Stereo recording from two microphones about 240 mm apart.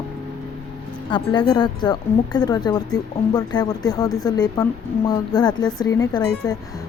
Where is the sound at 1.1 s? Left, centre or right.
Centre.